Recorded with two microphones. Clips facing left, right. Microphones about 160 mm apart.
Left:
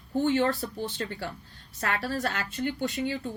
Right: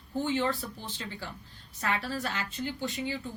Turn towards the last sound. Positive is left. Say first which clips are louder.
# left 4 dB
turn(degrees=60)  # may be behind; listen again after turning